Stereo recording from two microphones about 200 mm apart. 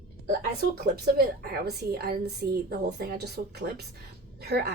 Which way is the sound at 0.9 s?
50° right (ahead or behind).